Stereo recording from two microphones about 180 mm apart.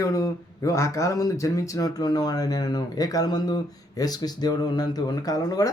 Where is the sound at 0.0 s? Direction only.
20° left (ahead or behind).